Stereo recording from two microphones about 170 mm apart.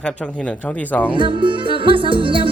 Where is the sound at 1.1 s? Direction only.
30° right (ahead or behind).